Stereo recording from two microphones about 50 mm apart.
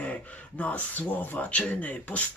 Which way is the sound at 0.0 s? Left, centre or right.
Left.